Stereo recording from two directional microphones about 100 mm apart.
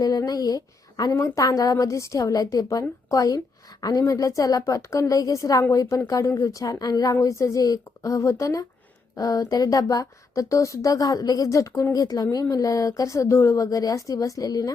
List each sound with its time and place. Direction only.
0.0 s a woman's voice: 40° left (ahead or behind)